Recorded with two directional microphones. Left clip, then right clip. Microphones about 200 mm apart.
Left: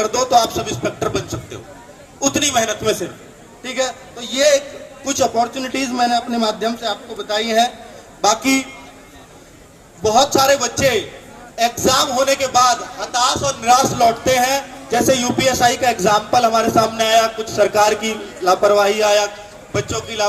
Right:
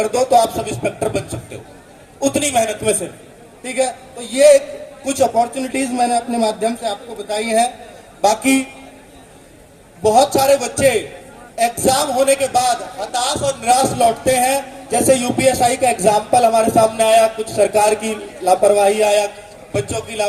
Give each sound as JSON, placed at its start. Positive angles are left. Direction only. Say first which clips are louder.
{"t": 0.0, "sound": "a man's voice", "louder": "right 1 dB", "side_deg": -55}
{"t": 10.0, "sound": "a man's voice", "louder": "right 1 dB", "side_deg": -55}